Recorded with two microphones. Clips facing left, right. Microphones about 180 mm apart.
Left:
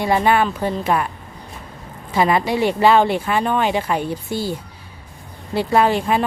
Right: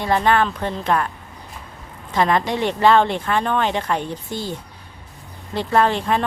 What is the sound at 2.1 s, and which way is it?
Speech, 5° left (ahead or behind).